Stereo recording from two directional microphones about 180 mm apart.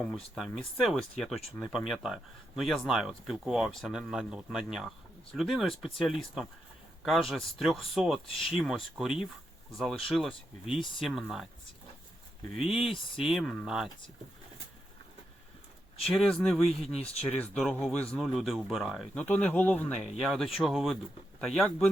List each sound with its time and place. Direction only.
0.3 s speech: centre (ahead or behind)
8.3 s speech: 30° left (ahead or behind)
8.5 s speech: centre (ahead or behind)
12.5 s speech: 5° right (ahead or behind)
16.0 s speech: centre (ahead or behind)
20.0 s speech: centre (ahead or behind)